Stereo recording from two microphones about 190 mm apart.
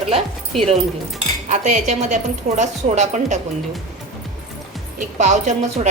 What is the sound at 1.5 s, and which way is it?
A woman's voice, 40° right (ahead or behind).